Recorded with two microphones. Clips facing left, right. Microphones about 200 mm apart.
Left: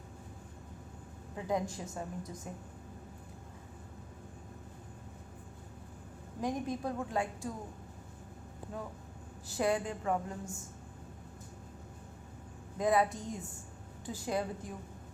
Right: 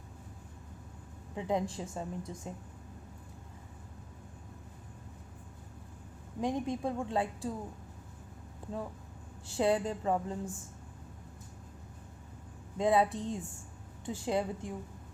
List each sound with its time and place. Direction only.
1.4 s a woman's voice: 25° right (ahead or behind)
6.4 s a woman's voice: 25° right (ahead or behind)
9.5 s a woman's voice: 30° right (ahead or behind)
12.7 s a woman's voice: 25° right (ahead or behind)